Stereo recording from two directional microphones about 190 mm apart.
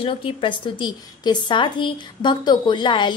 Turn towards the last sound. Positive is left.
turn(degrees=25)  # may be behind; listen again after turning